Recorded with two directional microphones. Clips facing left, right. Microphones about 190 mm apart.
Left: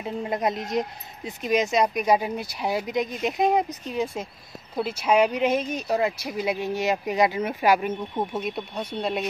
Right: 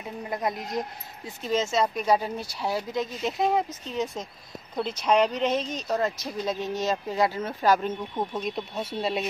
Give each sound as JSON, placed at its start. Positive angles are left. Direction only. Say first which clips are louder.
{"t": 0.3, "sound": "speech", "louder": "left 3 dB", "side_deg": 20}